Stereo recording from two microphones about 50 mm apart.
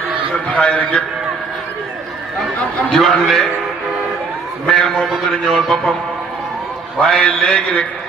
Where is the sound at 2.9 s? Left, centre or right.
Centre.